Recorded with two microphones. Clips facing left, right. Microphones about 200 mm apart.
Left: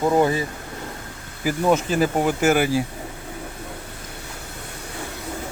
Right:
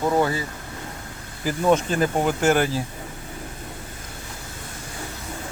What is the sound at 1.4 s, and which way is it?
Speech, 5° left (ahead or behind).